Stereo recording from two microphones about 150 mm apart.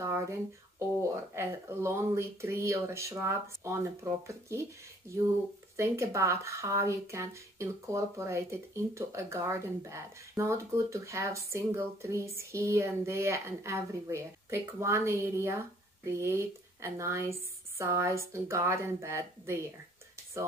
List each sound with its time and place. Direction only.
1.3 s speech: 15° right (ahead or behind)
5.8 s speech: 20° right (ahead or behind)